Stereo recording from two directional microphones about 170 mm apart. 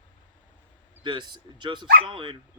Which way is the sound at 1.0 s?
25° right (ahead or behind).